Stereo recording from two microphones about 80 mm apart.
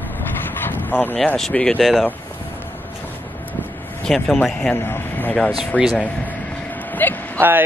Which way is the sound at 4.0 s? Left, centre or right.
Centre.